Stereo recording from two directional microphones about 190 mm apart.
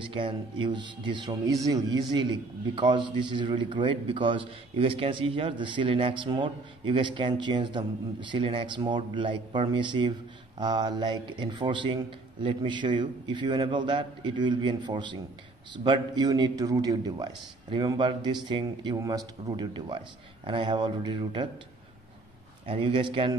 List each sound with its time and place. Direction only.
0.1 s speech: 25° right (ahead or behind)
22.7 s speech: 25° right (ahead or behind)